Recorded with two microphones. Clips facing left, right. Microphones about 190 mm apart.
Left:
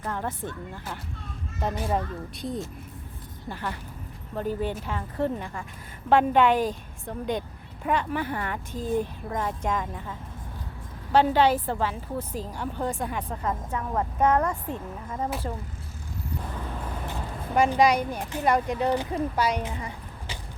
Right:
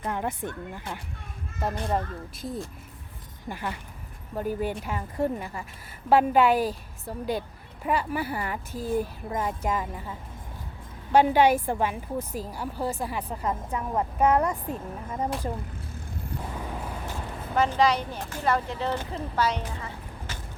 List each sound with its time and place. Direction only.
0.0 s speech: 15° right (ahead or behind)
1.6 s a child's voice: 5° left (ahead or behind)
13.3 s speech: 15° right (ahead or behind)
17.5 s speech: 15° left (ahead or behind)